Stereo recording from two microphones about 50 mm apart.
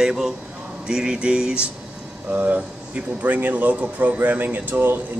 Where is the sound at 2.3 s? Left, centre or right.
Right.